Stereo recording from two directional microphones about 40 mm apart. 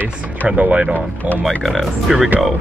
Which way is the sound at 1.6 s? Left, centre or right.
Centre.